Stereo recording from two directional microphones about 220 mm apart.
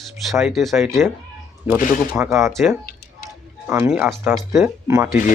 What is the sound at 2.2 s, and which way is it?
Speech, 15° right (ahead or behind).